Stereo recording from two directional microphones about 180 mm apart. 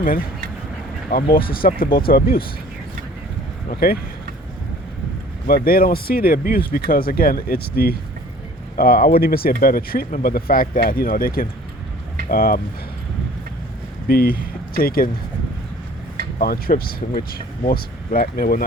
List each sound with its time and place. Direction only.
1.1 s speech: 55° left (ahead or behind)
3.7 s speech: 55° left (ahead or behind)
5.5 s speech: 55° left (ahead or behind)
14.1 s speech: 55° left (ahead or behind)
16.4 s speech: 55° left (ahead or behind)